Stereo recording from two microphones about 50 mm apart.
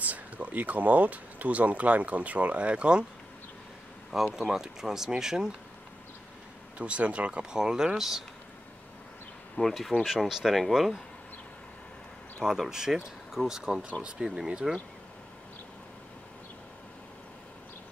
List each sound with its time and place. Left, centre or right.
0.0 s speech: right
4.1 s speech: centre
6.8 s speech: right
9.6 s speech: centre
10.0 s speech: centre
12.6 s speech: centre